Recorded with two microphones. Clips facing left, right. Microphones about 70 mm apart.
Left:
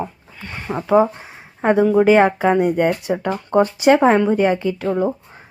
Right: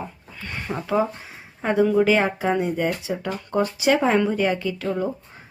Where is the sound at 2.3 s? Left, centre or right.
Left.